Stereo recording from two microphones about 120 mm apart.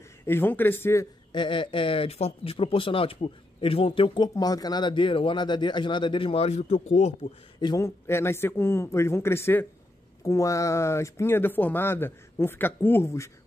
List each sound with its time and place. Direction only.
0.2 s speech: 20° left (ahead or behind)
1.3 s speech: 40° left (ahead or behind); by 7.2 s 65° left (ahead or behind)
7.8 s speech: 20° left (ahead or behind)